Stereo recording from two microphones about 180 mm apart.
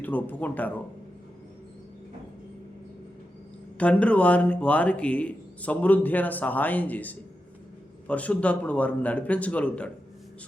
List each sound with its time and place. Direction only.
0.0 s speech: 10° left (ahead or behind)
3.8 s speech: 5° left (ahead or behind)